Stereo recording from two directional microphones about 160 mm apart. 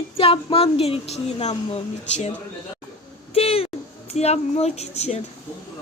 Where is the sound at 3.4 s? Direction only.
40° left (ahead or behind).